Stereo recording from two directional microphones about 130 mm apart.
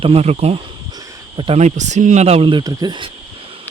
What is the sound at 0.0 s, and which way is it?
Speech, 50° right (ahead or behind).